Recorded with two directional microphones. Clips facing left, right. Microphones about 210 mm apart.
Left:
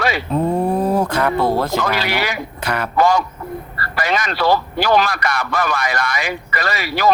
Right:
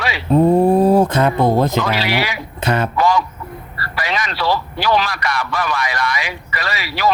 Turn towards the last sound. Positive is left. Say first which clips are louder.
# left 1 dB
turn(degrees=45)  # may be behind; listen again after turning